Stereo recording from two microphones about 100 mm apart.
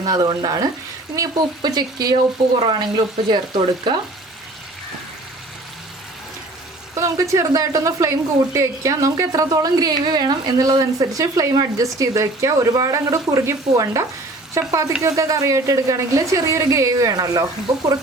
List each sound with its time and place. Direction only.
0.0 s speech: 40° right (ahead or behind)
2.6 s speech: 55° right (ahead or behind)
6.9 s speech: 30° right (ahead or behind)